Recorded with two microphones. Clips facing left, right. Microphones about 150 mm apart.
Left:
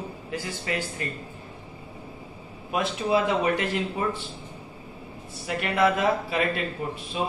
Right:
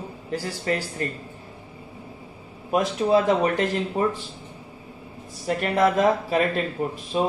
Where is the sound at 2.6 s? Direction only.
40° right (ahead or behind).